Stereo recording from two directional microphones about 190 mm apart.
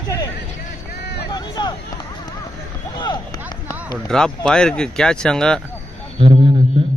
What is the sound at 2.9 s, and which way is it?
Speech, 25° left (ahead or behind).